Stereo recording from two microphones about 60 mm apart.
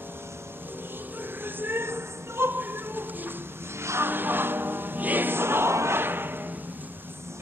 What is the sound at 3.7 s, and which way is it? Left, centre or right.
Music, right.